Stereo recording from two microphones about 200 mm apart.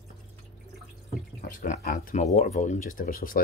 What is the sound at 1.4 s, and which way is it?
Speech, 40° left (ahead or behind).